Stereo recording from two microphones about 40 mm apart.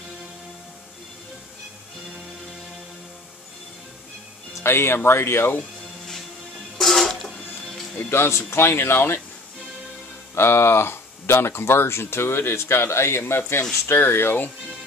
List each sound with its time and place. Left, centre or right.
4.6 s speech: left
6.8 s music: centre
8.1 s speech: left
10.3 s speech: left